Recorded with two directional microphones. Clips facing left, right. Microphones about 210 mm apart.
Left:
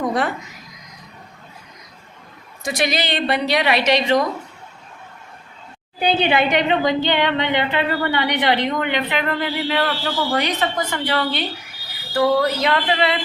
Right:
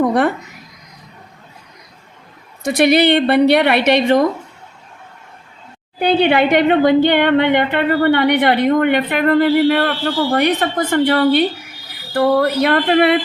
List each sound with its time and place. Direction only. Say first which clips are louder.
0.0 s a sound: right 7 dB; 60° right (ahead or behind)
2.6 s a woman's voice: right 10 dB; 60° right (ahead or behind)
6.0 s a woman's voice: right 5 dB; 60° right (ahead or behind)